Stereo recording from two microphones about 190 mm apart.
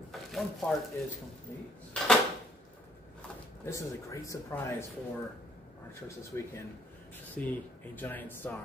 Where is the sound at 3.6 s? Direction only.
15° left (ahead or behind).